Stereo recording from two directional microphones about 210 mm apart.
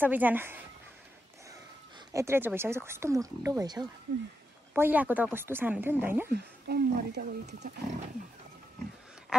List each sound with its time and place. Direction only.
0.0 s speech: 10° right (ahead or behind)
2.1 s speech: 10° right (ahead or behind)
6.3 s speech: 50° right (ahead or behind)
9.3 s a sound: 5° right (ahead or behind)